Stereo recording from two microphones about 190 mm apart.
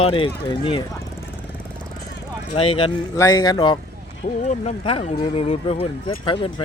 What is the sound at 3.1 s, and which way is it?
Speech, 20° left (ahead or behind).